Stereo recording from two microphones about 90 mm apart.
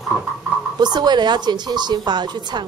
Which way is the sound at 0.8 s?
55° right (ahead or behind).